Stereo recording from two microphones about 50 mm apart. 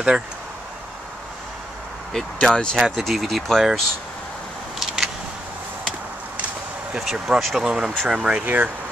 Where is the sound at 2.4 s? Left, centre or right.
Centre.